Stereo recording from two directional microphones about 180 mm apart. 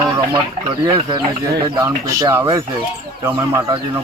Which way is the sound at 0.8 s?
25° right (ahead or behind).